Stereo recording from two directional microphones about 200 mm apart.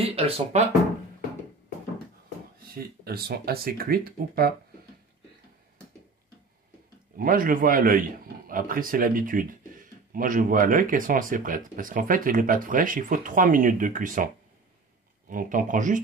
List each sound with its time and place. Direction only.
0.0 s speech: 30° right (ahead or behind)
2.7 s speech: 50° right (ahead or behind)
7.2 s speech: 45° right (ahead or behind)